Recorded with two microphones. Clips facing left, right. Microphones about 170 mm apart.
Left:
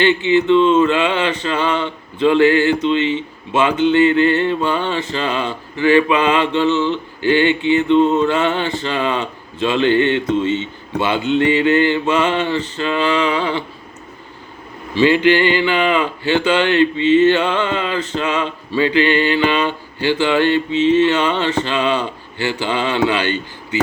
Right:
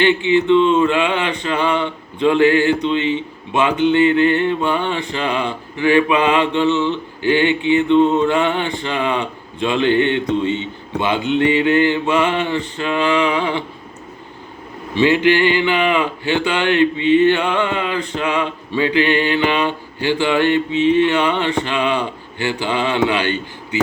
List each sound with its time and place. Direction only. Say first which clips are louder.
0.0 s speech: even; 15° right (ahead or behind)
14.9 s speech: left 1 dB; 20° right (ahead or behind)